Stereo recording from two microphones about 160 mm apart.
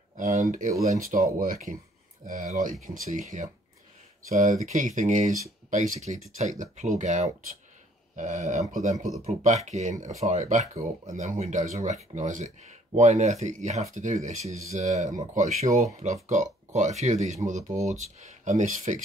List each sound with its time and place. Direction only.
0.2 s speech: 50° right (ahead or behind)